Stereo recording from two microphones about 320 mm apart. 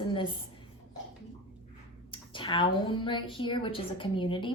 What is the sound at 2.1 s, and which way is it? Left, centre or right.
A woman's voice, centre.